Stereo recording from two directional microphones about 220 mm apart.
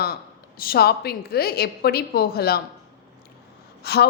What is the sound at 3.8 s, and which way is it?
Speech, 45° left (ahead or behind).